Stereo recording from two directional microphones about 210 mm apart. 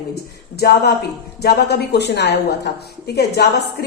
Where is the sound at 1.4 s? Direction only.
50° left (ahead or behind).